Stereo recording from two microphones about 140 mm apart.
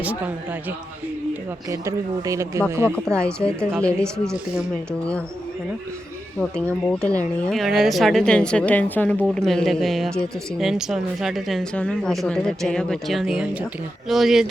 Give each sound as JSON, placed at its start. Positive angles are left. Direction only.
{"t": 1.7, "sound": "speech", "side_deg": -25}
{"t": 3.8, "sound": "speech", "side_deg": 5}
{"t": 6.4, "sound": "speech", "side_deg": 10}
{"t": 7.5, "sound": "a woman's voice", "side_deg": 0}